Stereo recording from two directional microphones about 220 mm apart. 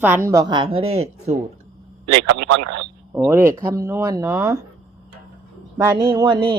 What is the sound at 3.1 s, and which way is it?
A woman's voice, 10° right (ahead or behind).